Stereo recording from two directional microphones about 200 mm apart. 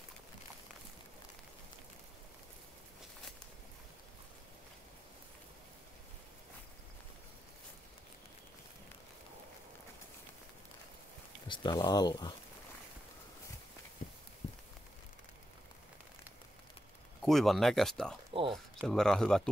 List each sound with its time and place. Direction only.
11.4 s speech: 25° left (ahead or behind)
14.0 s a sound: 40° left (ahead or behind)
17.2 s speech: centre (ahead or behind)